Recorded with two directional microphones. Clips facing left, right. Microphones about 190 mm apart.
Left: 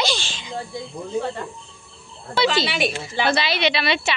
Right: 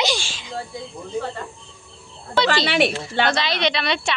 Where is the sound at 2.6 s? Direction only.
60° right (ahead or behind).